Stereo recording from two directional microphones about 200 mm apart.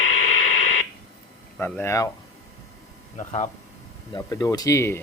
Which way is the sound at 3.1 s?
35° left (ahead or behind).